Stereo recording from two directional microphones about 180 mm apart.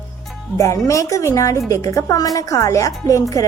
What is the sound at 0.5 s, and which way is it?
A woman's voice, 15° left (ahead or behind).